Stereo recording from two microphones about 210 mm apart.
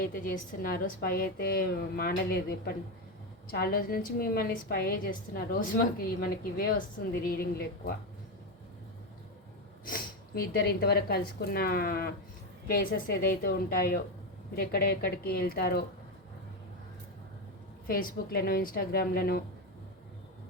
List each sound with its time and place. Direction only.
0.0 s a woman's voice: 45° left (ahead or behind)
9.8 s a woman's voice: 45° left (ahead or behind)
17.8 s a woman's voice: 45° left (ahead or behind)